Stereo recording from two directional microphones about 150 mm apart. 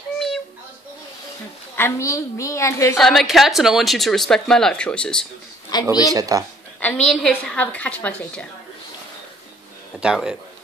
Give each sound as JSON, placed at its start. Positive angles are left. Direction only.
{"t": 1.8, "sound": "a woman's voice", "side_deg": 20}
{"t": 3.0, "sound": "speech", "side_deg": 0}
{"t": 5.7, "sound": "speech", "side_deg": 30}
{"t": 6.1, "sound": "speech", "side_deg": -25}
{"t": 6.8, "sound": "a woman's voice", "side_deg": 10}
{"t": 9.9, "sound": "speech", "side_deg": -5}